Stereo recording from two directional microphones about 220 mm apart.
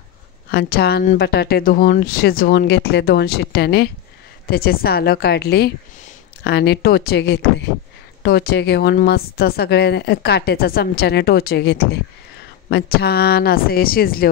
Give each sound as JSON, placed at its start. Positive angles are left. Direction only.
{"t": 0.5, "sound": "a woman's voice", "side_deg": 45}